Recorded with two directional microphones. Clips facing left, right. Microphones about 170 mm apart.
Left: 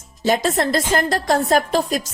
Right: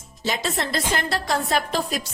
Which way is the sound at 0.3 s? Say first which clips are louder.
Left 8 dB; 45° left (ahead or behind).